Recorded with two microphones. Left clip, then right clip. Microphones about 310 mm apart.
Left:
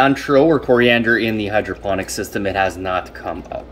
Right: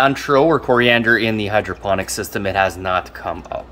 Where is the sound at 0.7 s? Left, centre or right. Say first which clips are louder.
Left 2 dB; right.